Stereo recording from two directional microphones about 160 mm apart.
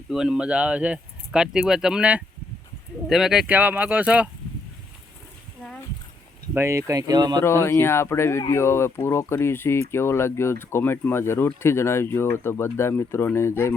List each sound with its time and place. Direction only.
0.1 s speech: 5° right (ahead or behind)
6.5 s speech: 15° right (ahead or behind)
7.4 s speech: 15° left (ahead or behind)